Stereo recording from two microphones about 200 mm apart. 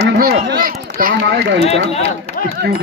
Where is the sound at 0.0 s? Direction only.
50° right (ahead or behind).